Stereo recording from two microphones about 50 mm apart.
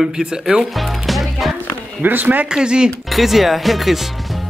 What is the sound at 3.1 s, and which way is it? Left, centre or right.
Speech, centre.